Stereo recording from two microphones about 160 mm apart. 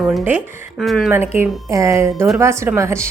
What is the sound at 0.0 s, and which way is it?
Speech, 5° right (ahead or behind).